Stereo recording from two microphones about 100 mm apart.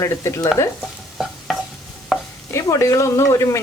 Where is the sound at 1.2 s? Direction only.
Centre (ahead or behind).